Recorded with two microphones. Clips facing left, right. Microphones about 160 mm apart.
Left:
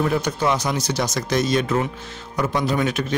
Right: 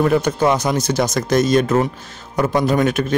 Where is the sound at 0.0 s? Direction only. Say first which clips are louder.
Right 5 dB; 50° right (ahead or behind).